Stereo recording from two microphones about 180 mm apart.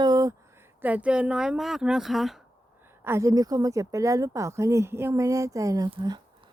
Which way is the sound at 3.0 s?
15° right (ahead or behind).